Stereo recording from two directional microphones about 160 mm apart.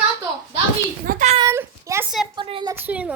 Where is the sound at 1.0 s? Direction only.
50° right (ahead or behind).